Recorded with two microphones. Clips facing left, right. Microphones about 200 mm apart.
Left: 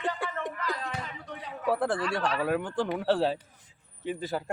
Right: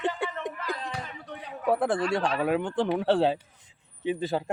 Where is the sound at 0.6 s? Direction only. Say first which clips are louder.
Even; 10° right (ahead or behind).